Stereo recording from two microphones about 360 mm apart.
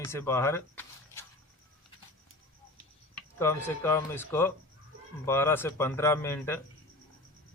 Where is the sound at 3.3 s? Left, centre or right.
Centre.